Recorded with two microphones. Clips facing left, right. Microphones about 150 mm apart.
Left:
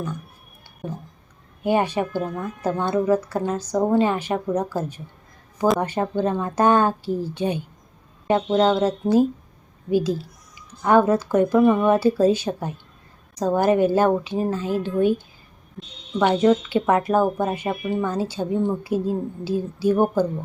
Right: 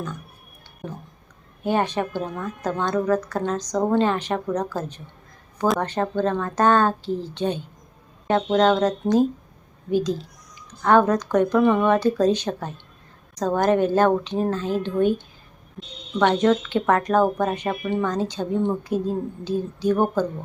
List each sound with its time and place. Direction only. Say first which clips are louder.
1.6 s speech: left 2 dB; 10° left (ahead or behind)
5.8 s speech: even; 10° left (ahead or behind)
16.1 s speech: left 1 dB; 10° left (ahead or behind)